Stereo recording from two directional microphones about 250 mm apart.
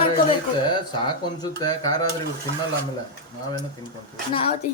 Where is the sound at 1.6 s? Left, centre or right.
Centre.